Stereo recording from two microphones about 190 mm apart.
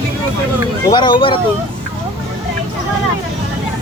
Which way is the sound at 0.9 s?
25° left (ahead or behind).